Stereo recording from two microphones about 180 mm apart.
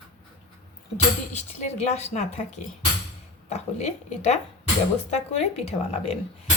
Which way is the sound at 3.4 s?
40° left (ahead or behind).